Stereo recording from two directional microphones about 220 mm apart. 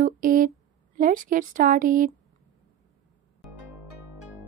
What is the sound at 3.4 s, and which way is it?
Music, centre (ahead or behind).